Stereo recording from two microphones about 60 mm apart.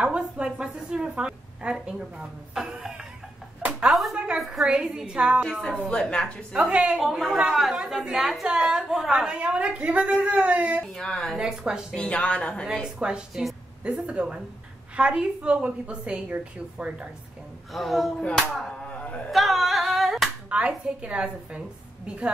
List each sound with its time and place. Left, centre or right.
0.0 s a woman's voice: centre
5.4 s a woman's voice: centre
5.8 s a woman's voice: centre
6.5 s a woman's voice: centre
7.0 s a man's voice: centre; by 10.8 s right
10.8 s a woman's voice: centre
11.3 s a woman's voice: centre
11.9 s a woman's voice: centre
12.8 s a woman's voice: centre
17.7 s a man's voice: centre
18.8 s a sound: centre
19.3 s singing: centre
20.4 s a woman's voice: right